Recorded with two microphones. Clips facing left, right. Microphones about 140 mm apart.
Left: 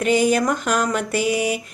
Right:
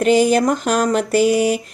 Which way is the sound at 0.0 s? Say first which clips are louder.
Right 4 dB; 35° right (ahead or behind).